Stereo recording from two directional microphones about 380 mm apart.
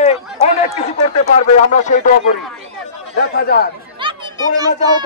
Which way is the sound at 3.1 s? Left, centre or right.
Left.